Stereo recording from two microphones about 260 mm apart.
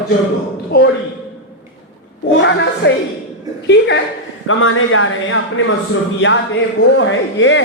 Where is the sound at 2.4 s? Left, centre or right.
Left.